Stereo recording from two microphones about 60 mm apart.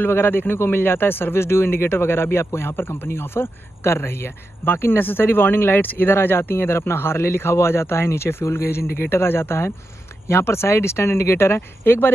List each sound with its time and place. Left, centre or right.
0.0 s a man's voice: left